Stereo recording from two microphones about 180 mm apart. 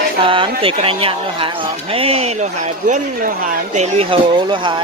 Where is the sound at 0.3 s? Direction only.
30° right (ahead or behind).